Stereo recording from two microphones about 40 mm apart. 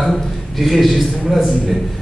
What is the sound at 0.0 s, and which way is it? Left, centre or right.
A man's voice, centre.